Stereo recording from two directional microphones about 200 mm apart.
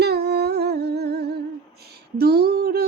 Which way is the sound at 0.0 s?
55° right (ahead or behind).